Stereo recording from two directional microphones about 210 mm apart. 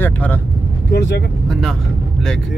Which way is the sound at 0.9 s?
55° left (ahead or behind).